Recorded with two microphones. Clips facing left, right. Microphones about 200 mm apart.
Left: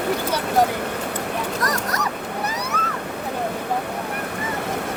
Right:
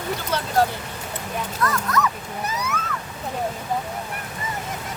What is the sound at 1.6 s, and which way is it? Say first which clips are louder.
Speech: right 1 dB; 40° left (ahead or behind).